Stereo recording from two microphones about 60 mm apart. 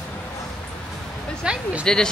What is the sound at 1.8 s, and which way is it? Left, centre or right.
Speech, centre.